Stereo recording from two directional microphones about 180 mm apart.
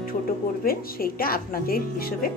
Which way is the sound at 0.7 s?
55° left (ahead or behind).